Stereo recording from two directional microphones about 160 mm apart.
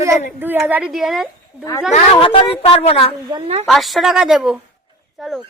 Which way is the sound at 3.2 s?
25° right (ahead or behind).